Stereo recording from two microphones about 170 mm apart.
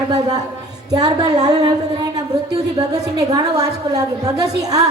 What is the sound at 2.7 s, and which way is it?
A woman's voice, 20° right (ahead or behind).